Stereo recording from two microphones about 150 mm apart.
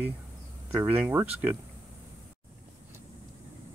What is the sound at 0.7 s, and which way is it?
Speech, 10° right (ahead or behind).